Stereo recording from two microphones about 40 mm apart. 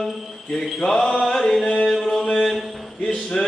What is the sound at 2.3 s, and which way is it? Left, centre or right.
Mantra, centre.